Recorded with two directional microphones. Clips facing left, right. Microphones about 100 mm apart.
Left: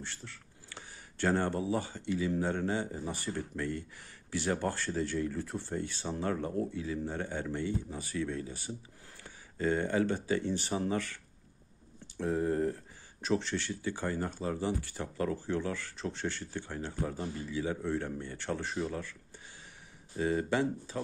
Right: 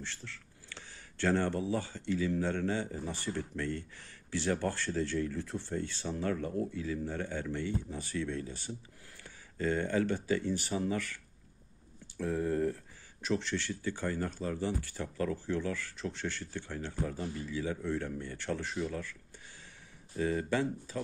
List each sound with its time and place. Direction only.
0.0 s speech: 15° left (ahead or behind)
12.2 s speech: 25° left (ahead or behind)
20.2 s speech: 25° left (ahead or behind)